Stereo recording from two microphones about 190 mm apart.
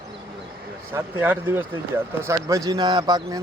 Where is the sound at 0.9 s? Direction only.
10° right (ahead or behind).